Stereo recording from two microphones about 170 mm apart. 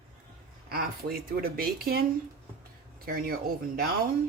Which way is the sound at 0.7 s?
60° right (ahead or behind).